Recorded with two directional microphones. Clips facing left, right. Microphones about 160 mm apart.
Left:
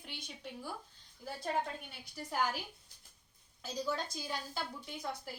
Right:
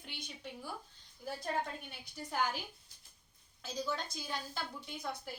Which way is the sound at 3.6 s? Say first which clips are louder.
Left 1 dB; 10° left (ahead or behind).